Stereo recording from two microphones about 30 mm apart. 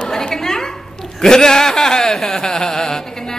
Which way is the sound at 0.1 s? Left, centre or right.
Centre.